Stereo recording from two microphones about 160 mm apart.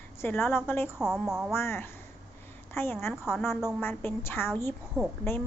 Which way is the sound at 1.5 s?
15° left (ahead or behind).